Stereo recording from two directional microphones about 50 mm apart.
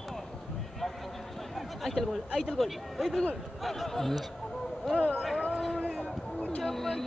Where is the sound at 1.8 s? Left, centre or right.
Centre.